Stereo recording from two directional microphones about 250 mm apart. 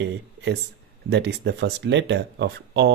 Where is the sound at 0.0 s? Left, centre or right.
Right.